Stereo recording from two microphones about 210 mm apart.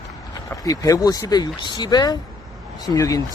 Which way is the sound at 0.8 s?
15° left (ahead or behind).